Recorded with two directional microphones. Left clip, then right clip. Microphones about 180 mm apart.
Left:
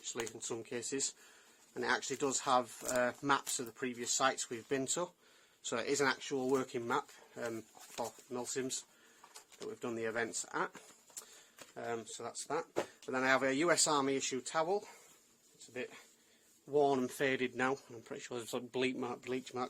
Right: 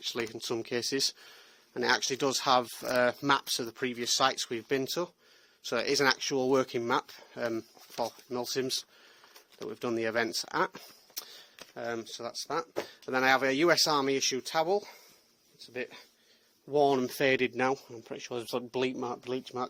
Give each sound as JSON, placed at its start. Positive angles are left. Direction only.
{"t": 0.0, "sound": "speech", "side_deg": -55}
{"t": 4.8, "sound": "speech", "side_deg": -35}
{"t": 13.1, "sound": "speech", "side_deg": -45}
{"t": 17.7, "sound": "speech", "side_deg": -25}